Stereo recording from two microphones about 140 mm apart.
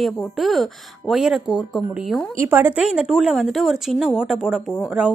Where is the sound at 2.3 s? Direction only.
15° right (ahead or behind).